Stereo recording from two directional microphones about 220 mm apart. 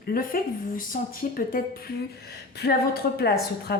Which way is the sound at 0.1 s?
40° left (ahead or behind).